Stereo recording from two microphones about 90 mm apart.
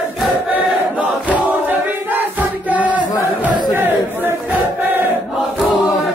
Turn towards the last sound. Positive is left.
turn(degrees=-20)  # may be behind; listen again after turning